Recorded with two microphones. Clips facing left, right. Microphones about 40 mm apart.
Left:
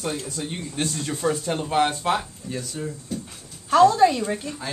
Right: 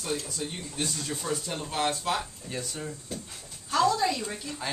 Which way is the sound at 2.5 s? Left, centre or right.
Centre.